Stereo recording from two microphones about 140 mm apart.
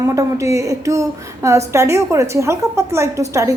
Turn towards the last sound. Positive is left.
turn(degrees=-20)  # may be behind; listen again after turning